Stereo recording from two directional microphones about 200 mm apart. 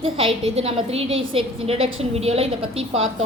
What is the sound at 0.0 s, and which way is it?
A woman's voice, 25° right (ahead or behind).